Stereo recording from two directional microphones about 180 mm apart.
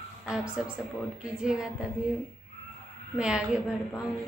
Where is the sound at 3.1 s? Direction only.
5° right (ahead or behind).